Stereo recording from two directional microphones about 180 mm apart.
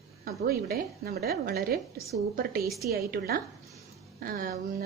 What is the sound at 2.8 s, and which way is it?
Speech, 60° right (ahead or behind).